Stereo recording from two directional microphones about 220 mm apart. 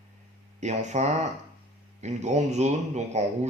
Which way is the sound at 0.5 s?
35° right (ahead or behind).